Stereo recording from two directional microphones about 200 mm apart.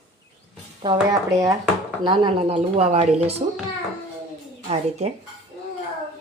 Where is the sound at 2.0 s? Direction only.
20° right (ahead or behind).